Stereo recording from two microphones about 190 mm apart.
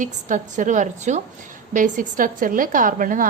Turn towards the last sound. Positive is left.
turn(degrees=-45)  # may be behind; listen again after turning